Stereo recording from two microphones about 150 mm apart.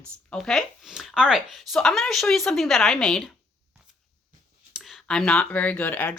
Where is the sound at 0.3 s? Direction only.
5° left (ahead or behind).